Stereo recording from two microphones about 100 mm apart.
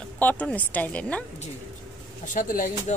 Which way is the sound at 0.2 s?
15° left (ahead or behind).